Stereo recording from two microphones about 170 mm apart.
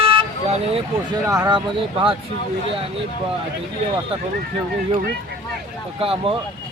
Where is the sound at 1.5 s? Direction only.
30° right (ahead or behind).